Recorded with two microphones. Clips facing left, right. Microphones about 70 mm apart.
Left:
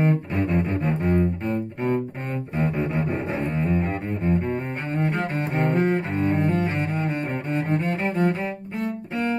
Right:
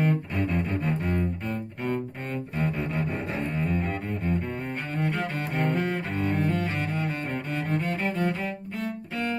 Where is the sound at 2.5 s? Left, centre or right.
Centre.